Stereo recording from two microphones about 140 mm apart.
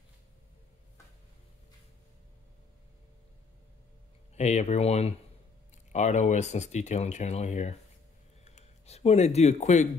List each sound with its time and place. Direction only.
4.4 s speech: 55° left (ahead or behind)